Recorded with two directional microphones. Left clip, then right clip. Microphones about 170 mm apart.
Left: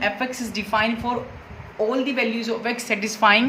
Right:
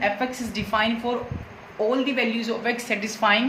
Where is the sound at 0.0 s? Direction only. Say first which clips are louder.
Even; 30° left (ahead or behind).